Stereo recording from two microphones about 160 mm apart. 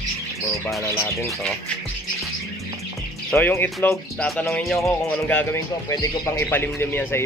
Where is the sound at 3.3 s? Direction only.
15° left (ahead or behind).